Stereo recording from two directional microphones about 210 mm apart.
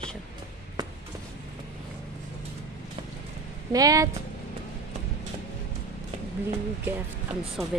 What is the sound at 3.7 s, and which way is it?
Speech, 15° right (ahead or behind).